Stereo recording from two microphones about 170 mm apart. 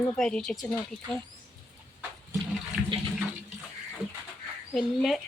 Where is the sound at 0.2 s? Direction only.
5° left (ahead or behind).